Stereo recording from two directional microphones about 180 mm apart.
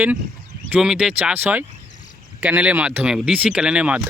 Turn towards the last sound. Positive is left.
turn(degrees=-5)  # may be behind; listen again after turning